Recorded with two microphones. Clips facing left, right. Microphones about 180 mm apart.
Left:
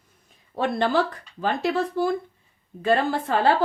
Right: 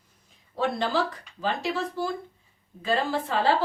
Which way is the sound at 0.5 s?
55° left (ahead or behind).